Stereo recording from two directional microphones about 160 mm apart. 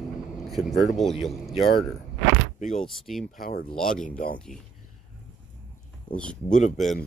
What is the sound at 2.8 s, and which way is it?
Speech, centre (ahead or behind).